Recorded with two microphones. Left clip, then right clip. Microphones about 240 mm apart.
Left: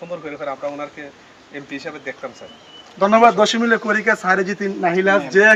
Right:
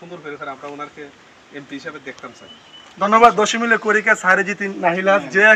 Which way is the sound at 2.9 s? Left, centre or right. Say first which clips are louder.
Even; centre.